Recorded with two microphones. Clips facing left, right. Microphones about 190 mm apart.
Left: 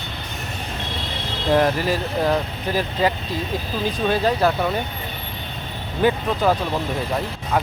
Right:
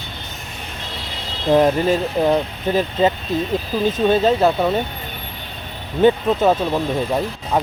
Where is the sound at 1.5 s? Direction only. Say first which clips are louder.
Right 4 dB; 20° right (ahead or behind).